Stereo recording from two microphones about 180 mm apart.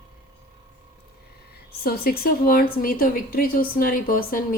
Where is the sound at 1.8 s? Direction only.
55° left (ahead or behind).